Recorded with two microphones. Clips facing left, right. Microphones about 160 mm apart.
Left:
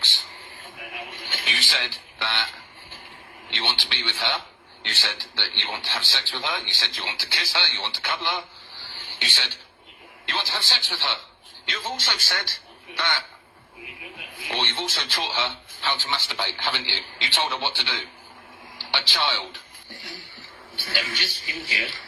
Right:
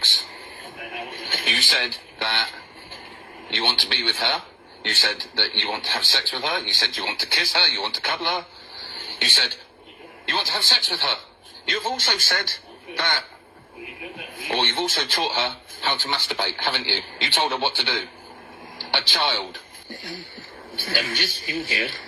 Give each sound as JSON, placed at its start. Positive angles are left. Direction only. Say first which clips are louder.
{"t": 0.8, "sound": "radio", "louder": "right 4 dB", "side_deg": -45}
{"t": 3.5, "sound": "speech", "louder": "right 4 dB", "side_deg": -45}
{"t": 9.0, "sound": "a sound", "louder": "right 4 dB", "side_deg": -45}
{"t": 10.2, "sound": "speech", "louder": "right 3 dB", "side_deg": -45}
{"t": 20.7, "sound": "speech", "louder": "right 4 dB", "side_deg": -45}